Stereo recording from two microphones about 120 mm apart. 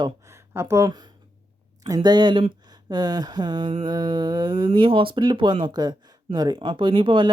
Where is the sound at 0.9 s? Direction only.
35° right (ahead or behind).